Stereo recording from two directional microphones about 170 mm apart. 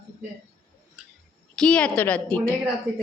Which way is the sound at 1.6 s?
5° left (ahead or behind).